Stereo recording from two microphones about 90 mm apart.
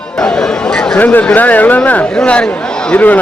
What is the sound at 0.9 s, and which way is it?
A man's voice, 20° left (ahead or behind).